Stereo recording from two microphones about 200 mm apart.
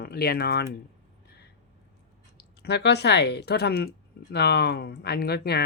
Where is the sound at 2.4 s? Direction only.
55° left (ahead or behind).